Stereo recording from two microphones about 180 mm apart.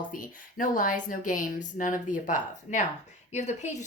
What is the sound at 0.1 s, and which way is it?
A woman's voice, 50° left (ahead or behind).